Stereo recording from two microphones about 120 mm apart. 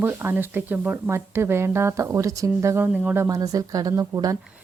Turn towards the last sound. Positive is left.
turn(degrees=-30)  # may be behind; listen again after turning